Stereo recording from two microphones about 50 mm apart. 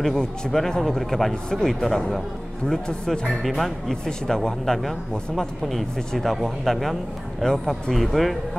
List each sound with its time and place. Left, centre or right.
0.0 s speech: centre
2.6 s a man's voice: centre
3.1 s a man's voice: centre
7.9 s speech: centre